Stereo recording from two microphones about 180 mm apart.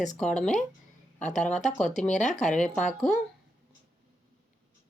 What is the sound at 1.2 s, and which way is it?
A woman's voice, 40° left (ahead or behind).